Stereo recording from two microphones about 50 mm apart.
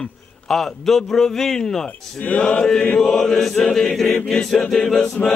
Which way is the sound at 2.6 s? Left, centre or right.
Centre.